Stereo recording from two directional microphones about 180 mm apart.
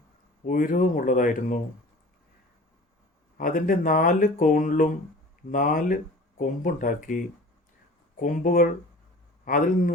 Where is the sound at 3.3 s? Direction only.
50° left (ahead or behind).